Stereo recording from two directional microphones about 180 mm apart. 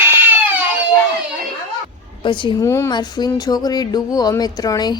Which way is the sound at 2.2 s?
25° left (ahead or behind).